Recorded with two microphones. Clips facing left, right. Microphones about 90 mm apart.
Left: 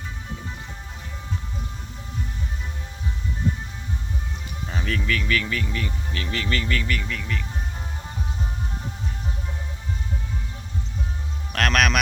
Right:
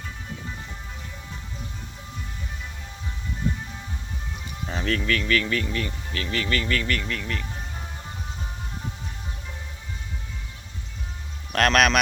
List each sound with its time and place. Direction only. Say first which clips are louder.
4.7 s speech: right 1 dB; 5° left (ahead or behind)
6.1 s speech: right 1 dB; 25° left (ahead or behind); by 7.4 s centre (ahead or behind)
11.5 s speech: right 2 dB; centre (ahead or behind)